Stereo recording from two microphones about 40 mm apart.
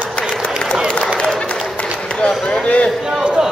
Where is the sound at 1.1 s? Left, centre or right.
Left.